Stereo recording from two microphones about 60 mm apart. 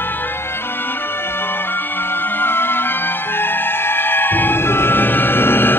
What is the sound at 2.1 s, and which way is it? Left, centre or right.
Music, left.